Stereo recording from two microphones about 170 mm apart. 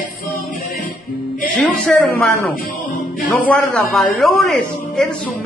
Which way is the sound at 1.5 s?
5° left (ahead or behind).